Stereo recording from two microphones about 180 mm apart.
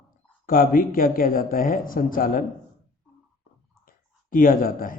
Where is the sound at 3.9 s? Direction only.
50° left (ahead or behind).